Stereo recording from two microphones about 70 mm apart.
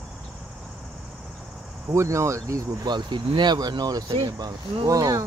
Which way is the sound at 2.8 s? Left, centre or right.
Right.